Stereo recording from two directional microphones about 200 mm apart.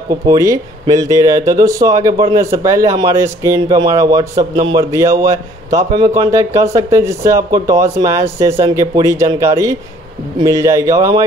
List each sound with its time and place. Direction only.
0.1 s a man's voice: 15° right (ahead or behind)